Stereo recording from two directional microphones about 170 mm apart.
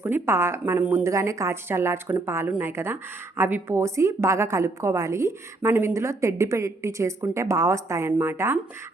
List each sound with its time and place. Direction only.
0.0 s speech: 15° right (ahead or behind)